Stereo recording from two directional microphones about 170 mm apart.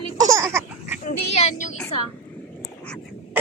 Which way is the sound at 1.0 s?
45° left (ahead or behind).